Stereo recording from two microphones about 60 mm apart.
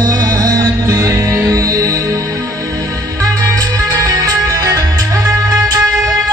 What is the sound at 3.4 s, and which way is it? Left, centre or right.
Music, right.